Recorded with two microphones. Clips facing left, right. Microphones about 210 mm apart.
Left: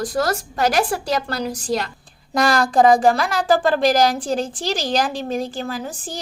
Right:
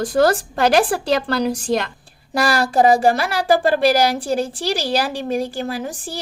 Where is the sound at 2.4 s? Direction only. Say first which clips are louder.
Left 1 dB; 5° right (ahead or behind).